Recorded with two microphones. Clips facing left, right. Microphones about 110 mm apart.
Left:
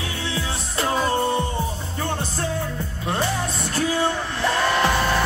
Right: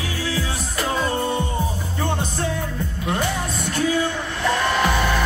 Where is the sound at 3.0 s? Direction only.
30° left (ahead or behind).